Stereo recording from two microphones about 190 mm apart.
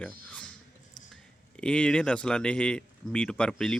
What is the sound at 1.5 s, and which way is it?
Speech, 5° left (ahead or behind).